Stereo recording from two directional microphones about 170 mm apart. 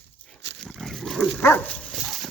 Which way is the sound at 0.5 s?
Centre (ahead or behind).